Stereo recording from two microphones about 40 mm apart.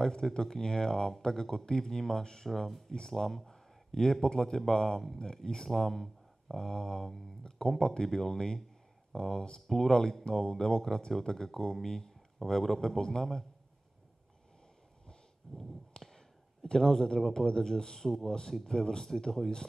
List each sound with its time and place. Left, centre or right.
0.0 s a man's voice: centre
15.0 s a sound: centre
16.6 s speech: centre